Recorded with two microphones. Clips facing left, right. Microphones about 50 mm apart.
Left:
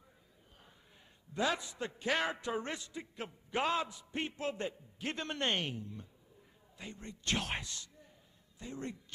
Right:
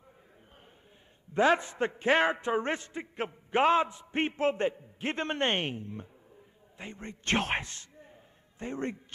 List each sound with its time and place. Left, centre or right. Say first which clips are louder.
1.3 s a man's voice: right 10 dB; right